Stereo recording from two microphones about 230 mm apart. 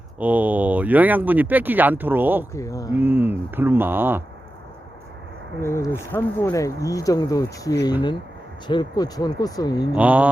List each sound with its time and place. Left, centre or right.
0.2 s speech: centre
2.5 s speech: centre
2.9 s speech: centre
5.5 s speech: centre
9.9 s speech: centre